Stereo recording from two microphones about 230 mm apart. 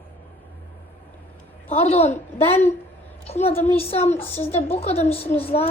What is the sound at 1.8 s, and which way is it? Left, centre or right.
Speech, left.